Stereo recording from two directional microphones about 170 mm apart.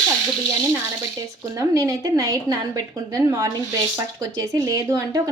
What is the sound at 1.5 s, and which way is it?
A woman's voice, 20° right (ahead or behind).